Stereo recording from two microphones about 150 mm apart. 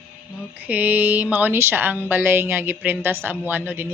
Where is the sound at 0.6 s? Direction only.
10° right (ahead or behind).